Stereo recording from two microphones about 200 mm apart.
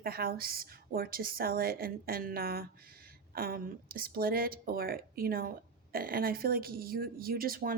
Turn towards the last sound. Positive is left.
turn(degrees=-45)  # may be behind; listen again after turning